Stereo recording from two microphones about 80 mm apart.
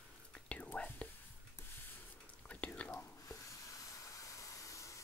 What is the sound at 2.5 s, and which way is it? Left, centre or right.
Whispering, centre.